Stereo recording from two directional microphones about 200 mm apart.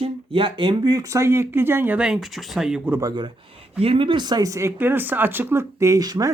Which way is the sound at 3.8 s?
25° right (ahead or behind).